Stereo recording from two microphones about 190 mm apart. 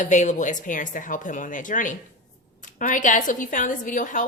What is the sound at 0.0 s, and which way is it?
A woman's voice, 40° left (ahead or behind).